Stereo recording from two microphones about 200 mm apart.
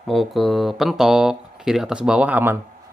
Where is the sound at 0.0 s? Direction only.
Centre (ahead or behind).